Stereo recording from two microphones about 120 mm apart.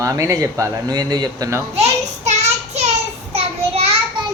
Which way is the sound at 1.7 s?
65° right (ahead or behind).